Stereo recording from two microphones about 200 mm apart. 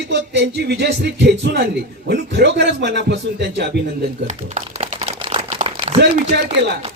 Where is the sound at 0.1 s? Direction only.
60° right (ahead or behind).